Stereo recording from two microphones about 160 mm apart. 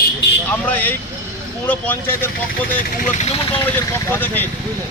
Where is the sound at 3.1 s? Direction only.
40° left (ahead or behind).